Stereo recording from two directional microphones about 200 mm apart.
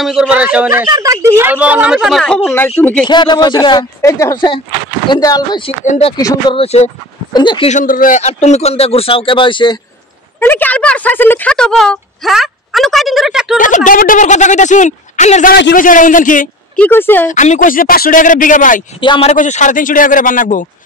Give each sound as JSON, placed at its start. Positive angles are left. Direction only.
{"t": 0.0, "sound": "speech", "side_deg": -5}
{"t": 3.1, "sound": "speech", "side_deg": 20}
{"t": 7.7, "sound": "speech", "side_deg": 45}
{"t": 10.4, "sound": "speech", "side_deg": 10}
{"t": 13.6, "sound": "a woman's voice", "side_deg": 40}
{"t": 16.7, "sound": "speech", "side_deg": 10}
{"t": 17.3, "sound": "a woman's voice", "side_deg": 40}
{"t": 18.9, "sound": "speech", "side_deg": 25}
{"t": 19.3, "sound": "a woman's voice", "side_deg": 40}